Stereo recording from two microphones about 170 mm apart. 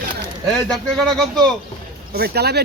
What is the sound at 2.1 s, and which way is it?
Speech, 70° right (ahead or behind).